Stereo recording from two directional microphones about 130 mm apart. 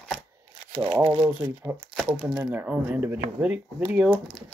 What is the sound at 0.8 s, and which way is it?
Speech, 20° right (ahead or behind).